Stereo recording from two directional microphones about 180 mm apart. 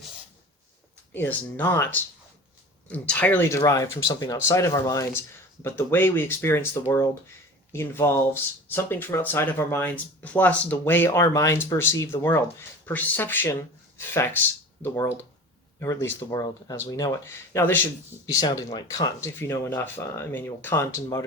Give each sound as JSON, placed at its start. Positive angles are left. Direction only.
{"t": 1.1, "sound": "speech", "side_deg": 10}
{"t": 7.7, "sound": "speech", "side_deg": 15}
{"t": 14.8, "sound": "speech", "side_deg": 15}